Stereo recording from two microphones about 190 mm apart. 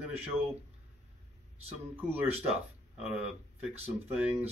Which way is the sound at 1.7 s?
5° right (ahead or behind).